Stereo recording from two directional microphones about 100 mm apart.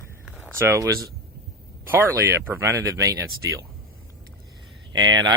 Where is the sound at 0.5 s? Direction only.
25° right (ahead or behind).